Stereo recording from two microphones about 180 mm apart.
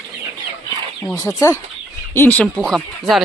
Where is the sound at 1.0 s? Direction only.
20° left (ahead or behind).